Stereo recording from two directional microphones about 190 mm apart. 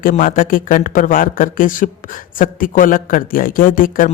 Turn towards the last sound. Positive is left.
turn(degrees=45)  # may be behind; listen again after turning